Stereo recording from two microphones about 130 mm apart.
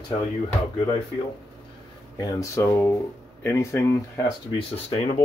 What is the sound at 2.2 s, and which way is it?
Speech, 25° left (ahead or behind).